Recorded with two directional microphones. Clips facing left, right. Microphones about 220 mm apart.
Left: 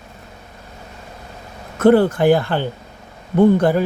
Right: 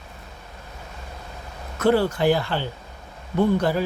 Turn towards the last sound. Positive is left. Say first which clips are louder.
# left 7 dB
turn(degrees=50)  # may be behind; listen again after turning